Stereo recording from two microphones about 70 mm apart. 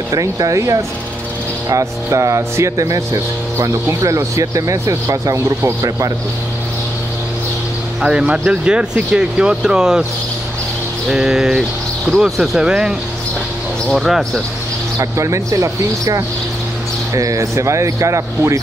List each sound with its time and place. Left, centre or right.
0.1 s speech: right
8.0 s speech: centre
11.1 s speech: centre
13.9 s speech: centre
15.0 s speech: right